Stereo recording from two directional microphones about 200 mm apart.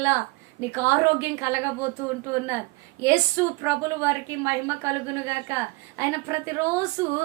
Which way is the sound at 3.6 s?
15° right (ahead or behind).